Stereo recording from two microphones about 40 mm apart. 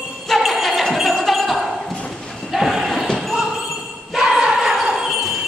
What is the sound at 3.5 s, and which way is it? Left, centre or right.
Jingle bell, centre.